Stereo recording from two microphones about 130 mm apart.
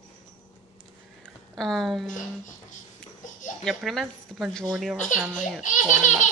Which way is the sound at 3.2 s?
80° left.